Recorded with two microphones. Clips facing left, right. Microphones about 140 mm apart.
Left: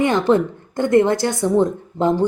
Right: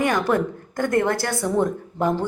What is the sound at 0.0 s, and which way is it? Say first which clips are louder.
A woman's voice: left 4 dB; 25° left (ahead or behind).